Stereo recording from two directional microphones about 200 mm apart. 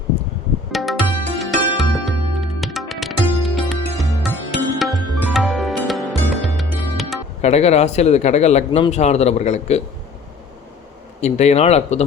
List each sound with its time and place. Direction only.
0.7 s tabla: centre (ahead or behind)
1.4 s music: centre (ahead or behind)
7.4 s speech: 30° left (ahead or behind)
11.2 s speech: 35° left (ahead or behind)